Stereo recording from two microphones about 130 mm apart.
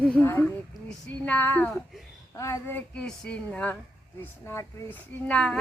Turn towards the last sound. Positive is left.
turn(degrees=5)  # may be behind; listen again after turning